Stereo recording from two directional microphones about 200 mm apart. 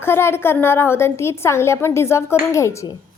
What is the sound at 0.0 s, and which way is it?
A woman's voice, 10° left (ahead or behind).